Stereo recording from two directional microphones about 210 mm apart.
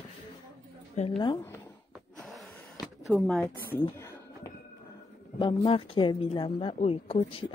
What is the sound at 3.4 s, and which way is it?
Speech, 10° left (ahead or behind).